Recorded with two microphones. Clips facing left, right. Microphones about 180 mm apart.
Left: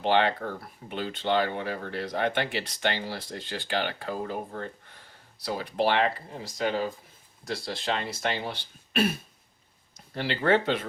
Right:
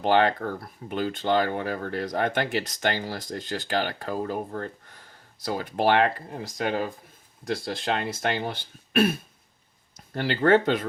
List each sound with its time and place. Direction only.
0.0 s speech: 45° right (ahead or behind)
10.2 s speech: 50° right (ahead or behind)